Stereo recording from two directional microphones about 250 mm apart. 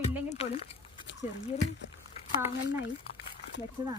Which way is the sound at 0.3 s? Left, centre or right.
Left.